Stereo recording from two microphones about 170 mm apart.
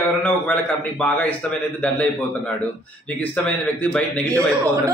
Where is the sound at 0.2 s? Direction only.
10° left (ahead or behind).